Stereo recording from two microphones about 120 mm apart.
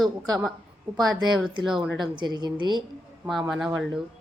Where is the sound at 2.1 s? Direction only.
40° right (ahead or behind).